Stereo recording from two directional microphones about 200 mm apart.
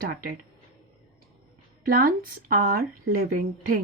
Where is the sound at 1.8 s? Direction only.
45° right (ahead or behind).